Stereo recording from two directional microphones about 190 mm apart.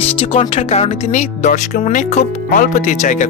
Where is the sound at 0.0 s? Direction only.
30° left (ahead or behind).